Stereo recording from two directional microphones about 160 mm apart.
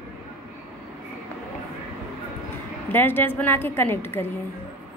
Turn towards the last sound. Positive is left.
turn(degrees=15)  # may be behind; listen again after turning